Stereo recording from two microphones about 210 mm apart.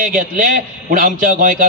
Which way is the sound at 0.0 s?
40° right (ahead or behind).